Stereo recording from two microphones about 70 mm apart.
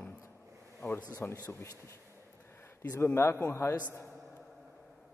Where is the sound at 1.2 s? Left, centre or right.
Left.